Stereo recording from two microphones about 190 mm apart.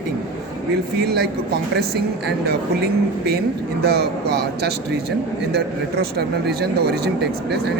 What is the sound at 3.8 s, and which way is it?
Speech, 55° right (ahead or behind).